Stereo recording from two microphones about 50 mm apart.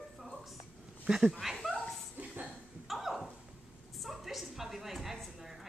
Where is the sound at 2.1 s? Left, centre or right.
Right.